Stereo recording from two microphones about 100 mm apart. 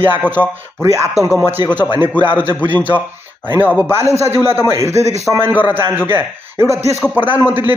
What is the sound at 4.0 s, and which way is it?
A man's voice, 30° right (ahead or behind).